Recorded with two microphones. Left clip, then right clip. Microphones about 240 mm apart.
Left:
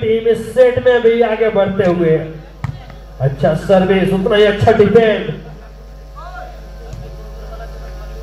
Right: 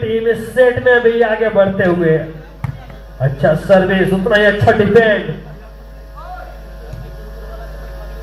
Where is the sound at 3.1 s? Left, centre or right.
Left.